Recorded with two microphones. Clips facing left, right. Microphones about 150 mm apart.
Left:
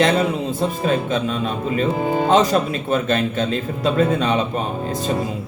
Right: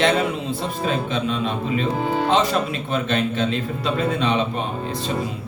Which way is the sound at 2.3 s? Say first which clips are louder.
Left 6 dB; 45° left (ahead or behind).